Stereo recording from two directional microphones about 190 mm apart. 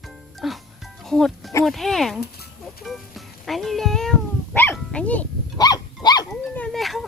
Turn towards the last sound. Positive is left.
turn(degrees=0)  # may be behind; listen again after turning